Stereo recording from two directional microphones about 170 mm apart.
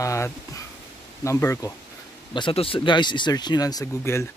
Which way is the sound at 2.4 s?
30° left (ahead or behind).